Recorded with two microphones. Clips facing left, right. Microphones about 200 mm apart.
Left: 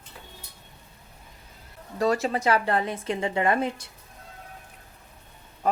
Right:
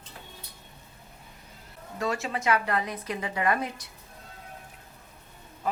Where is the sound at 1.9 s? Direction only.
35° left (ahead or behind).